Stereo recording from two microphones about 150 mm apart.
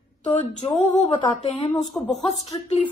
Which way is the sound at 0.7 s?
35° left (ahead or behind).